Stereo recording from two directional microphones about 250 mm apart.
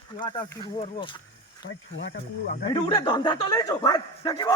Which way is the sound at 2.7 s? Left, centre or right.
Centre.